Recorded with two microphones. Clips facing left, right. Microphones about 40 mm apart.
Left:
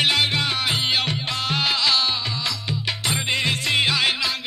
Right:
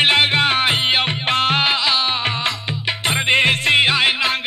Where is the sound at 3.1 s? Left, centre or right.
Right.